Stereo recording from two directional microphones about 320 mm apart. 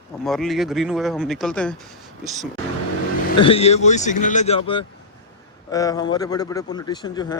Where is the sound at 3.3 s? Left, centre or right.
Centre.